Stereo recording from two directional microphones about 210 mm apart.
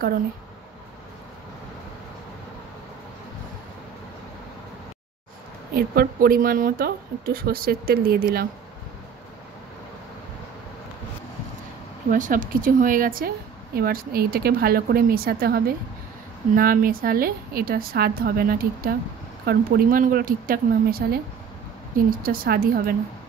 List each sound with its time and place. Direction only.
5.8 s speech: 45° right (ahead or behind)
12.1 s a woman's voice: 40° right (ahead or behind)